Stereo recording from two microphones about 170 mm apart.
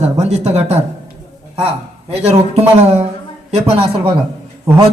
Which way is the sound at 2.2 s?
40° right (ahead or behind).